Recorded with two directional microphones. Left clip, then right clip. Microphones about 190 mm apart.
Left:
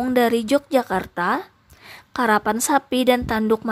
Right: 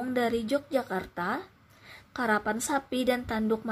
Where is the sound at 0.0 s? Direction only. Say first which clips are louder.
Left 10 dB; 30° left (ahead or behind).